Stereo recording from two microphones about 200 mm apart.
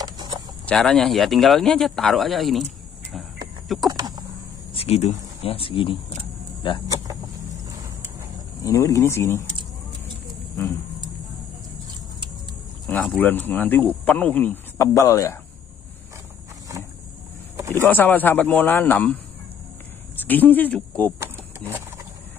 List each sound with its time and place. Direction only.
0.0 s a sound: 20° right (ahead or behind)
0.7 s speech: 5° left (ahead or behind)
3.6 s speech: centre (ahead or behind)
3.9 s speech: 20° right (ahead or behind)
4.7 s speech: 30° left (ahead or behind)
8.6 s a man's voice: 15° left (ahead or behind)
12.8 s a sound: 10° left (ahead or behind)
13.2 s a man's voice: 10° left (ahead or behind)
17.6 s a sound: 15° right (ahead or behind)
17.8 s a man's voice: 10° left (ahead or behind)
20.2 s a man's voice: 10° left (ahead or behind)
21.2 s a sound: 10° right (ahead or behind)